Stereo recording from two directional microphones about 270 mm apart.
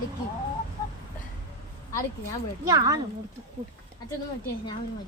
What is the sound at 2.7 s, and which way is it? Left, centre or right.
Speech, centre.